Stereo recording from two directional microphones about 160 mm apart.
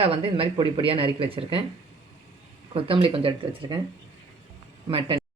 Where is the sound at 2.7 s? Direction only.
35° right (ahead or behind).